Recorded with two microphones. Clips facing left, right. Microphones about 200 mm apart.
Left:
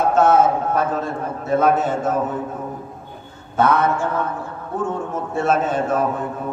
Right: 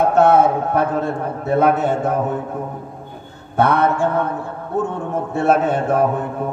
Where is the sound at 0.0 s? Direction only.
60° right (ahead or behind).